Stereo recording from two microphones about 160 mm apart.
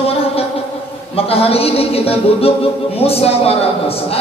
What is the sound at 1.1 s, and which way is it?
A man's voice, 40° left (ahead or behind).